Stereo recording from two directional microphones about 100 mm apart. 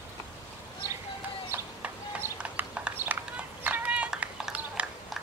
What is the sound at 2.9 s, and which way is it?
Run, 20° right (ahead or behind).